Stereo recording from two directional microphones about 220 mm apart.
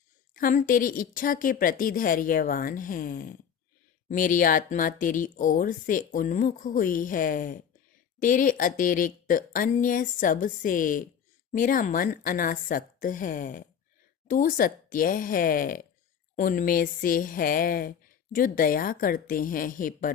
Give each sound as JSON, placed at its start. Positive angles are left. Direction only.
{"t": 0.3, "sound": "speech", "side_deg": 40}